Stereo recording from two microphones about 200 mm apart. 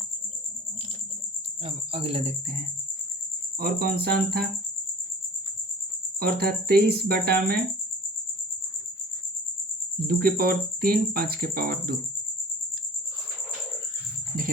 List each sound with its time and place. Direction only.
1.6 s speech: 30° right (ahead or behind)
3.6 s speech: 50° right (ahead or behind)
6.1 s speech: 50° right (ahead or behind)
10.1 s speech: 50° right (ahead or behind)